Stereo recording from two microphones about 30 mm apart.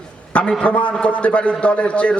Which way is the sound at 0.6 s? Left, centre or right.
Left.